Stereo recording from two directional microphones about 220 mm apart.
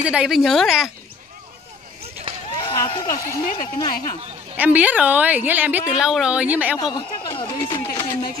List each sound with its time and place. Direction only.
0.0 s speech: 5° right (ahead or behind)
2.6 s speech: 20° left (ahead or behind)
3.4 s speech: 35° left (ahead or behind)
4.6 s a woman's voice: 5° right (ahead or behind)
6.8 s a woman's voice: 20° left (ahead or behind)